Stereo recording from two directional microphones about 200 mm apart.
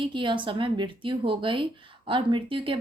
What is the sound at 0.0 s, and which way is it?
A woman's voice, 25° right (ahead or behind).